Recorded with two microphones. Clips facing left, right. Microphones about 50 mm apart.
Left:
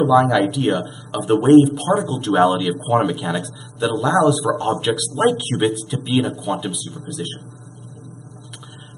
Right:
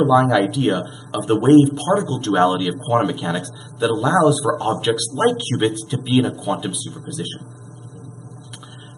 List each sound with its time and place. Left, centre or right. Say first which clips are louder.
0.0 s speech: even; centre